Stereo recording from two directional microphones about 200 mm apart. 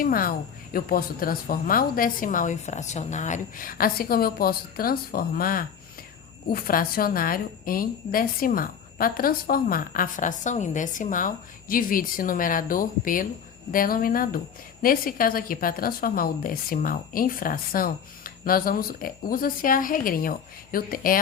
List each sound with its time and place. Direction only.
0.0 s speech: 45° left (ahead or behind)